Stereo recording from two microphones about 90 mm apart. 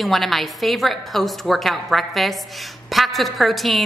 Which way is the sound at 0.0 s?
Centre (ahead or behind).